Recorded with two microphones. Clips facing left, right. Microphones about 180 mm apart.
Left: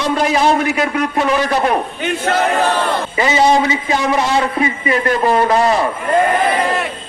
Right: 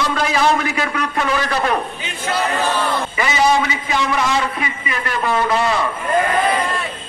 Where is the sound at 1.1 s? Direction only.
20° left (ahead or behind).